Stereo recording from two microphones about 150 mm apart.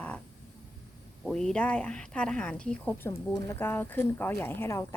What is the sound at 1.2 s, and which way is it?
A woman's voice, 5° left (ahead or behind).